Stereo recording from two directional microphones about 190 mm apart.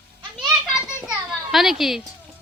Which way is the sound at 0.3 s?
Centre (ahead or behind).